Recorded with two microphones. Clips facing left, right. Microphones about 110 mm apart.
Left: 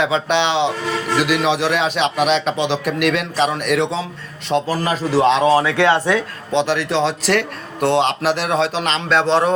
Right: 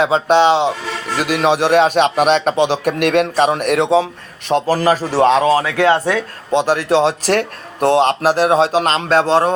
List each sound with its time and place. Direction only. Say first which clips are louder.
0.0 s speech: right 5 dB; 40° right (ahead or behind)